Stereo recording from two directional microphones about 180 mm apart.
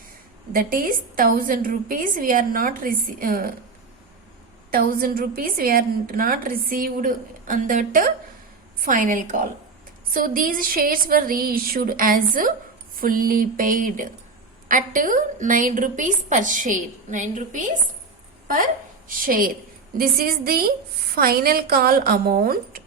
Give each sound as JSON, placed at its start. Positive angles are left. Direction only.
{"t": 0.5, "sound": "a woman's voice", "side_deg": -50}
{"t": 4.7, "sound": "a woman's voice", "side_deg": -55}